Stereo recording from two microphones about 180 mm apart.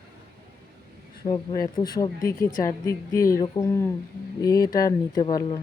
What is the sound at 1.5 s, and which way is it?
Speech, 20° left (ahead or behind).